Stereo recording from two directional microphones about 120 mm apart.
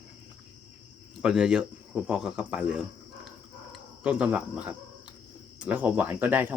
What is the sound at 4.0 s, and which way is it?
Speech, 10° right (ahead or behind).